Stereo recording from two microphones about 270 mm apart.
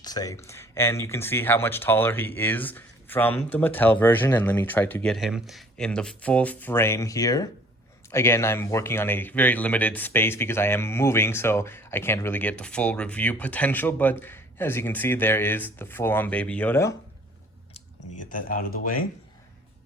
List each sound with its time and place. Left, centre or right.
0.0 s speech: centre
18.3 s speech: left